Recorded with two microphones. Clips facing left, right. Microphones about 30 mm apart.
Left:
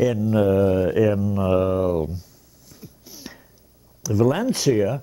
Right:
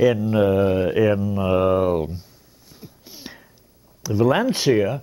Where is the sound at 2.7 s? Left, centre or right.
Right.